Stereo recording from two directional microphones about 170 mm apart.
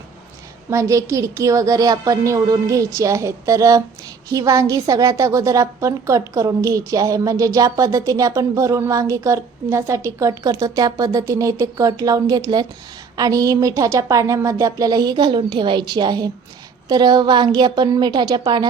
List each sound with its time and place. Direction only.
0.7 s a woman's voice: 20° right (ahead or behind)